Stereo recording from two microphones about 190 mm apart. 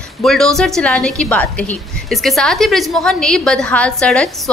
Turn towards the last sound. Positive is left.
turn(degrees=5)  # may be behind; listen again after turning